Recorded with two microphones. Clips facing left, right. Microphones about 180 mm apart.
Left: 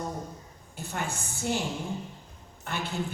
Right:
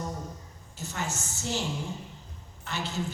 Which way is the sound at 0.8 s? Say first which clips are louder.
Left 1 dB; 55° left (ahead or behind).